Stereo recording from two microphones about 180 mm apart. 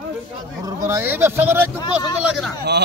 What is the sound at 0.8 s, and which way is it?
Speech, 10° right (ahead or behind).